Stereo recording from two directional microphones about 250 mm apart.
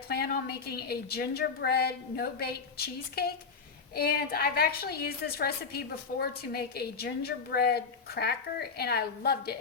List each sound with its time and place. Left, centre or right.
0.1 s a woman's voice: left